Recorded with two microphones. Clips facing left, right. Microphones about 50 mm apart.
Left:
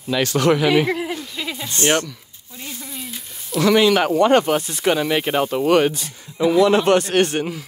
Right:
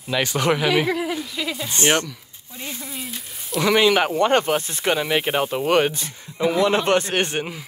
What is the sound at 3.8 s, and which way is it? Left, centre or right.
Speech, right.